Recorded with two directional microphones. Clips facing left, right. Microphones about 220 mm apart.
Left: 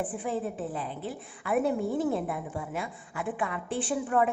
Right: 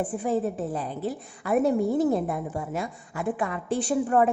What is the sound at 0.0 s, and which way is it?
A woman's voice, 40° right (ahead or behind).